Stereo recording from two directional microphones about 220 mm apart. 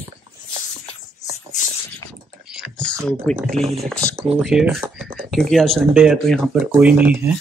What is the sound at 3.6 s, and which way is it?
Speech, 30° right (ahead or behind).